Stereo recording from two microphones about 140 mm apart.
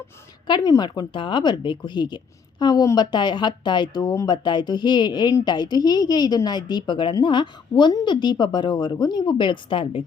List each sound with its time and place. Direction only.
0.4 s a woman's voice: 30° left (ahead or behind)